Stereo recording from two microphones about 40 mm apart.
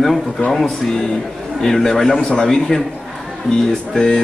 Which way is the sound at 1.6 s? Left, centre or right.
Centre.